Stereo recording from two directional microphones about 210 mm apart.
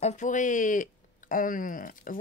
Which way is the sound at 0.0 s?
35° left (ahead or behind).